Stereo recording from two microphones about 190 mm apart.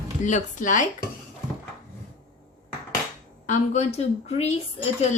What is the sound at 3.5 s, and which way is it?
A woman's voice, 35° left (ahead or behind).